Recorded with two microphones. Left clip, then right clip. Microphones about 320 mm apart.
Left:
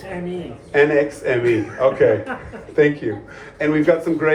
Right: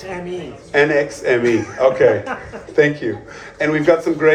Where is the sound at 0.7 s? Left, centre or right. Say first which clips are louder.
Right 1 dB; right.